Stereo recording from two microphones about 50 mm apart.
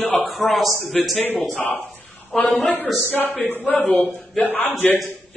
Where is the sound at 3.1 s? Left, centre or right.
Left.